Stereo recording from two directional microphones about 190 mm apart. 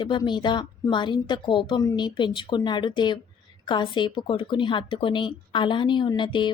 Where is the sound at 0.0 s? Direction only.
25° left (ahead or behind).